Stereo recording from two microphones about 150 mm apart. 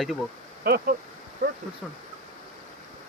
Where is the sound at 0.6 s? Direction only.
90° right.